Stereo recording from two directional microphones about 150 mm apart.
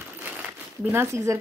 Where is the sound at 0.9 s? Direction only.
20° right (ahead or behind).